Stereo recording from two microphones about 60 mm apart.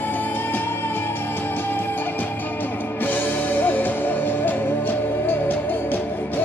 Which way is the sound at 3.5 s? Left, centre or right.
Left.